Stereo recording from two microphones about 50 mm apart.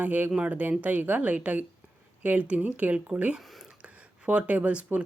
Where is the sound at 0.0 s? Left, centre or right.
Right.